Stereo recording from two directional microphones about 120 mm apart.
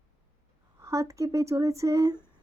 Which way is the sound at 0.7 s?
25° right (ahead or behind).